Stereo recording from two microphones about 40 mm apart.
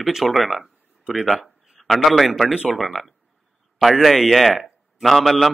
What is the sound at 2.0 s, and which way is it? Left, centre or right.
A man's voice, centre.